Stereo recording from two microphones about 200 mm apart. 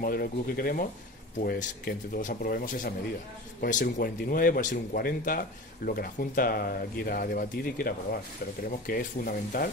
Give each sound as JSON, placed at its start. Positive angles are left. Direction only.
{"t": 0.0, "sound": "speech", "side_deg": 45}